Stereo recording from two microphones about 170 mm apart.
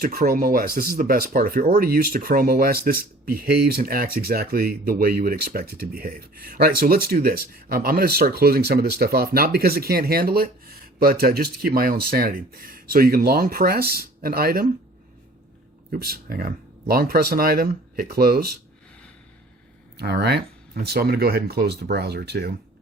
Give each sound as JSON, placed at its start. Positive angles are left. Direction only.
{"t": 0.0, "sound": "speech", "side_deg": -55}
{"t": 15.9, "sound": "speech", "side_deg": -60}
{"t": 20.0, "sound": "speech", "side_deg": -70}